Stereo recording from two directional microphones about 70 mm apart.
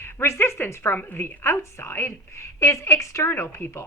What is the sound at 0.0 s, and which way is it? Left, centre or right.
A woman's voice, left.